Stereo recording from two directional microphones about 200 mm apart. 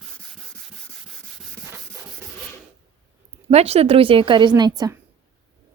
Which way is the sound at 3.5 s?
30° right (ahead or behind).